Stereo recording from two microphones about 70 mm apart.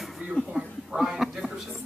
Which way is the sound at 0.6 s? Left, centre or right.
Centre.